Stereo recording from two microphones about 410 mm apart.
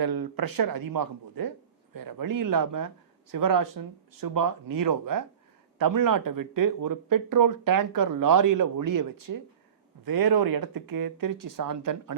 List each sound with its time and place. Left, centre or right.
0.0 s speech: right